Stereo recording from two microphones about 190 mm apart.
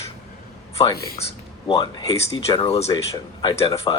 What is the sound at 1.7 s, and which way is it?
Speech, 20° left (ahead or behind).